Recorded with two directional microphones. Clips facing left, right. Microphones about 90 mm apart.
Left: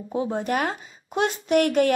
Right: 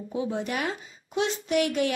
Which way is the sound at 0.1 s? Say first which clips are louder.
Left 5 dB; 45° left (ahead or behind).